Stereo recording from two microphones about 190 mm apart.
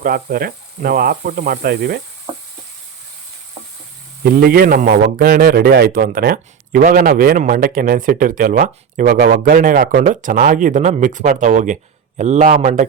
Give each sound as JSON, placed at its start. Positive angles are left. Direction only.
{"t": 0.0, "sound": "a man's voice", "side_deg": -50}
{"t": 4.2, "sound": "a man's voice", "side_deg": -55}